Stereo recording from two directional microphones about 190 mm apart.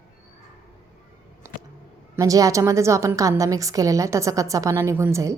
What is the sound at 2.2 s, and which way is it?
A woman's voice, 20° right (ahead or behind).